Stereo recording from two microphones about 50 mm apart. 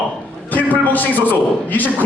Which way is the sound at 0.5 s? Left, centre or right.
Left.